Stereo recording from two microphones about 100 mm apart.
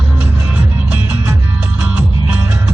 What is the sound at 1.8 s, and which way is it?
Music, 10° right (ahead or behind).